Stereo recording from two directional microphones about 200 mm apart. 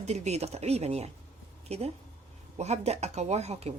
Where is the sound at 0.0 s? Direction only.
35° right (ahead or behind).